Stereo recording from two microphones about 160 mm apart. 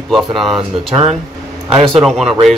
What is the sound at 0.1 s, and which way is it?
Speech, centre (ahead or behind).